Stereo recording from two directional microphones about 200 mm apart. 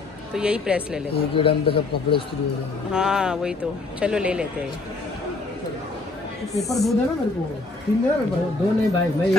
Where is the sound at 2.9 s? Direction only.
5° right (ahead or behind).